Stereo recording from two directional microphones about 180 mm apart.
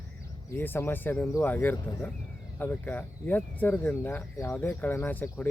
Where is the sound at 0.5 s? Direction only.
10° left (ahead or behind).